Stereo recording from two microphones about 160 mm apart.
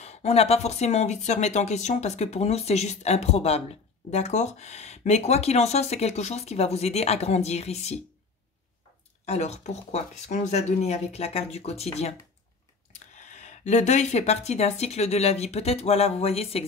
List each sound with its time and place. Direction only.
0.0 s speech: 45° left (ahead or behind)
9.2 s speech: 45° left (ahead or behind)
13.3 s speech: 50° left (ahead or behind)